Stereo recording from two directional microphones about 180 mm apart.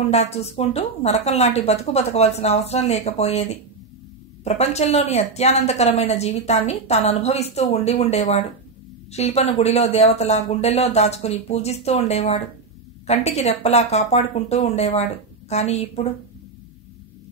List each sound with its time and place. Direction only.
0.1 s speech: 35° left (ahead or behind)
4.5 s speech: 35° left (ahead or behind)